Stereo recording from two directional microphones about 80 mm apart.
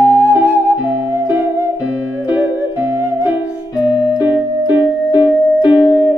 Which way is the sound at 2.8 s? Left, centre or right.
Right.